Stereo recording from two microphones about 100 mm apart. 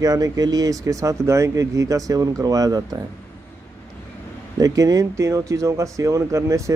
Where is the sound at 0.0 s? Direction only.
40° right (ahead or behind).